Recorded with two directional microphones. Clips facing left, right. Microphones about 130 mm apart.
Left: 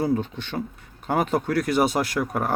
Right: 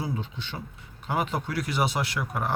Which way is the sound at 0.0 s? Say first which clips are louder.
Left 9 dB; 50° left (ahead or behind).